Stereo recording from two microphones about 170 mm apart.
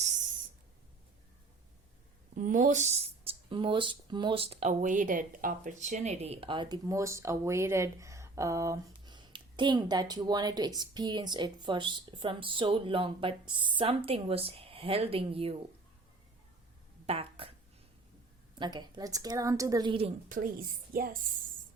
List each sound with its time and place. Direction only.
2.3 s a woman's voice: 50° right (ahead or behind); by 15.6 s 35° right (ahead or behind)
17.1 s speech: 35° right (ahead or behind)
18.5 s speech: 25° right (ahead or behind)
20.3 s a woman's voice: 60° right (ahead or behind)